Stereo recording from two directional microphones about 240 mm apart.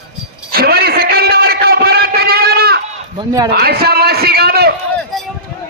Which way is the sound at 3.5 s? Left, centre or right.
Right.